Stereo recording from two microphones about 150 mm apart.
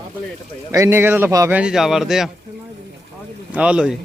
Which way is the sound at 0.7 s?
20° right (ahead or behind).